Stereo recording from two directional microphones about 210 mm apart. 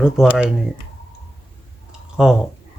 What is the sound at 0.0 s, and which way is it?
Speech, 5° right (ahead or behind).